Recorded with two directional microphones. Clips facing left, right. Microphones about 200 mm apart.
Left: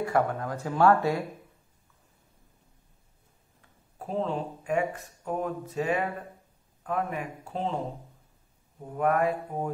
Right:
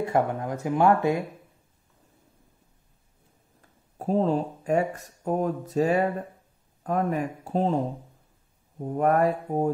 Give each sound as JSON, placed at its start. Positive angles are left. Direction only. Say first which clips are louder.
{"t": 0.0, "sound": "speech", "louder": "right 2 dB", "side_deg": -20}
{"t": 4.0, "sound": "speech", "louder": "right 6 dB", "side_deg": -40}
{"t": 8.8, "sound": "speech", "louder": "right 4 dB", "side_deg": -40}